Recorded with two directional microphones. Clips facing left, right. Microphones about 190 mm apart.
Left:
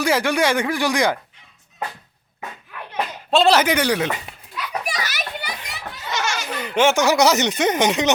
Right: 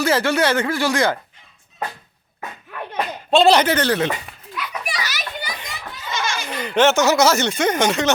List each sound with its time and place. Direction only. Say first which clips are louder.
0.0 s speech: right 1 dB; 15° left (ahead or behind)
3.2 s speech: right 2 dB; centre (ahead or behind)
4.5 s children playing: left 1 dB; 35° left (ahead or behind); by 5.5 s 60° left (ahead or behind)
6.1 s baby laughter: even; 70° left (ahead or behind)
6.5 s speech: right 2 dB; 5° left (ahead or behind)